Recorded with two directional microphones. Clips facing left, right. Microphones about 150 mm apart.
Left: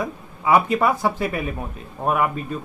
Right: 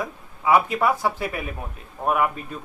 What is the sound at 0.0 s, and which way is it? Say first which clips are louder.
A man's voice: left 1 dB; centre (ahead or behind).